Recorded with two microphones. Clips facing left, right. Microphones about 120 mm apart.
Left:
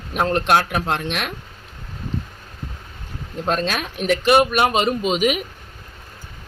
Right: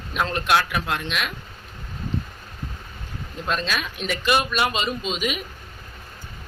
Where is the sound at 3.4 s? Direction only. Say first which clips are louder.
Left 4 dB; 50° left (ahead or behind).